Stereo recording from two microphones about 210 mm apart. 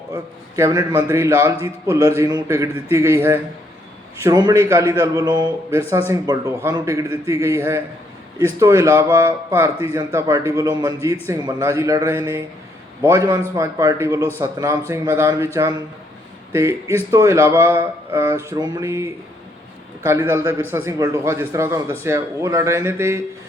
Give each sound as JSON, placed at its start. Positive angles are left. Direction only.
{"t": 0.5, "sound": "a man's voice", "side_deg": -15}